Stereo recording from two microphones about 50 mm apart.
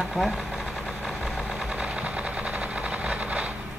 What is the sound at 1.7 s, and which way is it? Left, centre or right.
Vehicle, right.